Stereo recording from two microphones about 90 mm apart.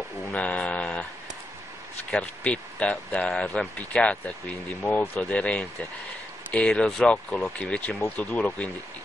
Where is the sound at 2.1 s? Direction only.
15° left (ahead or behind).